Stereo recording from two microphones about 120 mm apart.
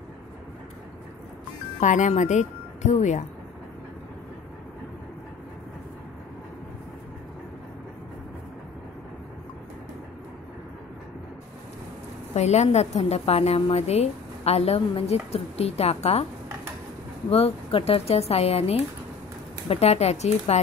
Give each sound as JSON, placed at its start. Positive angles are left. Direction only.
{"t": 1.8, "sound": "speech", "side_deg": 90}
{"t": 12.4, "sound": "a woman's voice", "side_deg": 65}
{"t": 17.3, "sound": "a woman's voice", "side_deg": 55}